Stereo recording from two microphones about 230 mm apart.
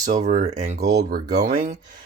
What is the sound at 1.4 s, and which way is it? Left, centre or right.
Speech, right.